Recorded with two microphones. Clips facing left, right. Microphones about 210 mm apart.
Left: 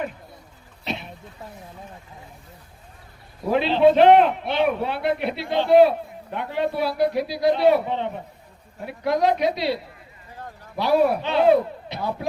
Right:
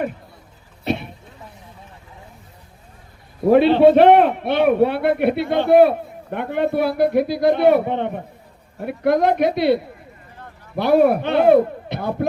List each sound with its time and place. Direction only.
0.9 s speech: 55° right (ahead or behind)
3.4 s a man's voice: 55° right (ahead or behind)